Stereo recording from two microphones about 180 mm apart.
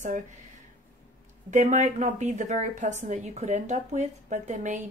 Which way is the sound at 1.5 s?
40° right (ahead or behind).